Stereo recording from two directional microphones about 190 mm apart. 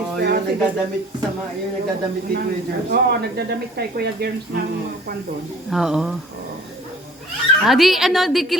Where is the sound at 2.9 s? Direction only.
55° right (ahead or behind).